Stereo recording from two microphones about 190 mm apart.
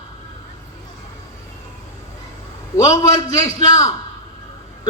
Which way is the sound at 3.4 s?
15° left (ahead or behind).